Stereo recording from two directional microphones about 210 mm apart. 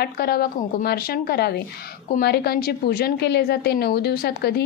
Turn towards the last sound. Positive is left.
turn(degrees=50)  # may be behind; listen again after turning